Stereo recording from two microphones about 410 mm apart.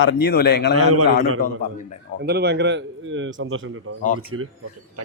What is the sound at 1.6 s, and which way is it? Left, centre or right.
Speech, centre.